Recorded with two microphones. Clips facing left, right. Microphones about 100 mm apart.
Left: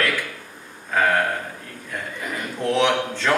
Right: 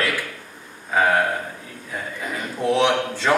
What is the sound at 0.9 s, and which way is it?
A man's voice, 15° right (ahead or behind).